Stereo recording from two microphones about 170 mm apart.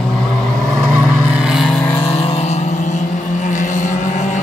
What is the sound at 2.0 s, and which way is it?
Vehicle, 35° left (ahead or behind).